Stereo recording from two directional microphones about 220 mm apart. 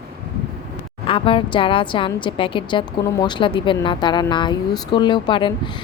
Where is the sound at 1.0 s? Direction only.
25° left (ahead or behind).